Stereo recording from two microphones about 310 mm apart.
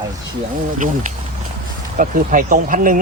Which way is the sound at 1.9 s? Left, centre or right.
Right.